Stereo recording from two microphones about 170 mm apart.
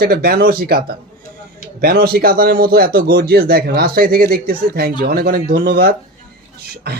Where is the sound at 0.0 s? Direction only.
65° right (ahead or behind).